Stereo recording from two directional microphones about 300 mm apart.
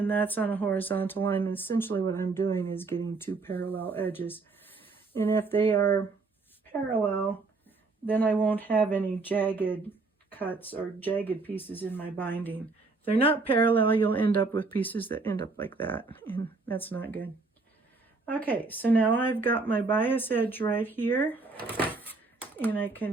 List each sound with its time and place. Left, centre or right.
0.0 s speech: centre
13.1 s speech: centre
14.0 s speech: centre
18.3 s speech: centre
22.5 s speech: centre